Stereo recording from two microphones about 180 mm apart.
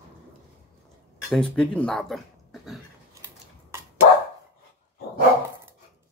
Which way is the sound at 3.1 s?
15° right (ahead or behind).